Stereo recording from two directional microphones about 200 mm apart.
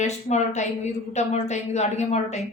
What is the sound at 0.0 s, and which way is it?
A woman's voice, 35° left (ahead or behind).